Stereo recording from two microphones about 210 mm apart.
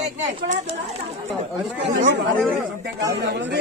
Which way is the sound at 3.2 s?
55° right (ahead or behind).